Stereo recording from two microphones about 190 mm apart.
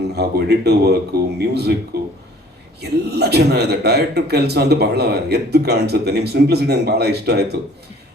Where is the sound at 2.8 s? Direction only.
60° right (ahead or behind).